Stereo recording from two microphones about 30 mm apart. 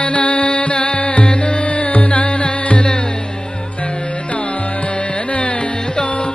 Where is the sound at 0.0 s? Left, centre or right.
Left.